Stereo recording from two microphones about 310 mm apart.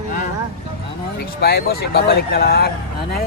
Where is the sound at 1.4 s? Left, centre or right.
Left.